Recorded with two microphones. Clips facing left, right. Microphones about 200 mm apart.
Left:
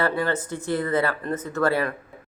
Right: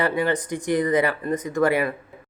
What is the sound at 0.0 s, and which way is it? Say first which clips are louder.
Speech: right 2 dB; 15° right (ahead or behind).